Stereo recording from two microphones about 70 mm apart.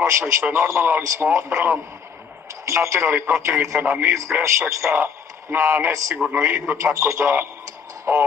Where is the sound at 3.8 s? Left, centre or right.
Right.